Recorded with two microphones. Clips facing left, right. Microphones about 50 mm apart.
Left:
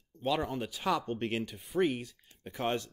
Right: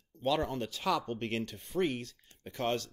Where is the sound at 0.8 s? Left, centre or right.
Left.